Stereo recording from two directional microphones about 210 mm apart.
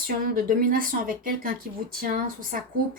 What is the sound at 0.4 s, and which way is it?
Speech, 40° right (ahead or behind).